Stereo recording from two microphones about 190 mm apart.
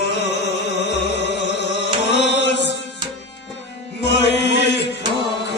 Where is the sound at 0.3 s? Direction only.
65° left (ahead or behind).